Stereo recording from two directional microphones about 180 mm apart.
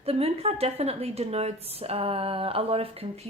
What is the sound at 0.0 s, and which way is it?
Speech, 35° right (ahead or behind).